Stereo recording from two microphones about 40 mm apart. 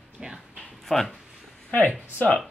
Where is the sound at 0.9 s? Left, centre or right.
Centre.